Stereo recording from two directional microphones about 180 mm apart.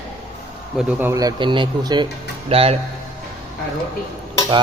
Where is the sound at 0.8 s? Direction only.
5° right (ahead or behind); by 2.7 s 35° right (ahead or behind).